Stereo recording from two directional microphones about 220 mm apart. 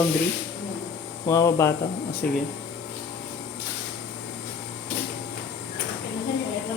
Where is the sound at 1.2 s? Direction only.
15° left (ahead or behind).